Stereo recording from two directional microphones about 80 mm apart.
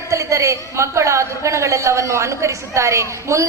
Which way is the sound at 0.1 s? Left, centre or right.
Right.